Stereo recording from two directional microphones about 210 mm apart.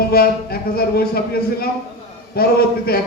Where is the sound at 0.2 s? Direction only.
45° left (ahead or behind).